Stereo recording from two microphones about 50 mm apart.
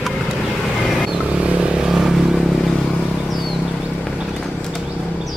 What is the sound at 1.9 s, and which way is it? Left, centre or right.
Vehicle, centre.